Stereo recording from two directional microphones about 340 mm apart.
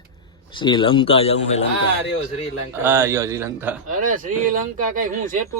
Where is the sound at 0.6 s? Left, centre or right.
Centre.